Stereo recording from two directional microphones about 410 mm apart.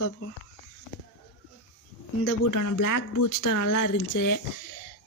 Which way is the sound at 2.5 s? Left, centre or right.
Left.